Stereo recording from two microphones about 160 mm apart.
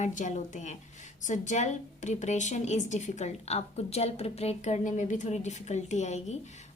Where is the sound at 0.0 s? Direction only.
50° left (ahead or behind).